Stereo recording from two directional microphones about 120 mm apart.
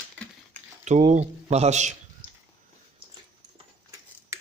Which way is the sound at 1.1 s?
65° right (ahead or behind).